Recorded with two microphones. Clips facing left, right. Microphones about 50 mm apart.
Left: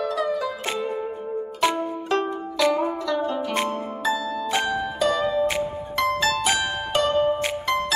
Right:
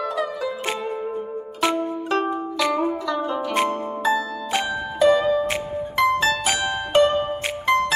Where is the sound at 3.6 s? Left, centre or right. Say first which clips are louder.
Right 3 dB; right.